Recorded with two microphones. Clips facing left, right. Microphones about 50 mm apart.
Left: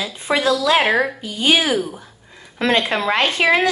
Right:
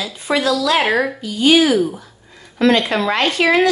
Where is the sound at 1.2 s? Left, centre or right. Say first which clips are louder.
Right 5 dB; left.